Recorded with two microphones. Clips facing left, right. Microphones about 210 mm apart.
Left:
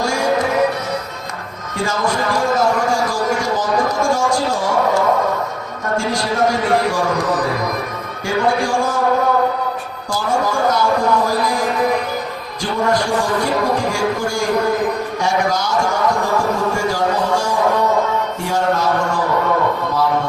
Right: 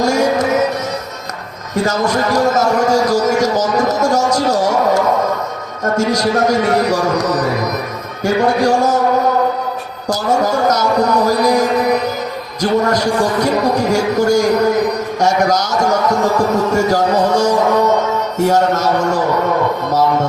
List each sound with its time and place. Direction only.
0.0 s music: 45° right (ahead or behind)
1.7 s a sound: 40° right (ahead or behind)
5.8 s a man's voice: 40° right (ahead or behind)
10.1 s a man's voice: 40° right (ahead or behind)
12.6 s a man's voice: 40° right (ahead or behind)